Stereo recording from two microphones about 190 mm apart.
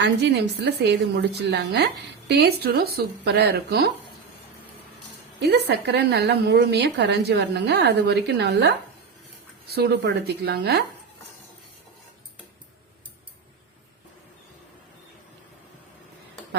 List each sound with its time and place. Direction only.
0.0 s a woman's voice: 65° right (ahead or behind)
5.4 s a woman's voice: 65° right (ahead or behind)